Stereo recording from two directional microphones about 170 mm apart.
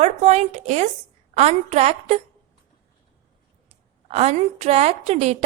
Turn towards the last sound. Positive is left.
turn(degrees=-40)  # may be behind; listen again after turning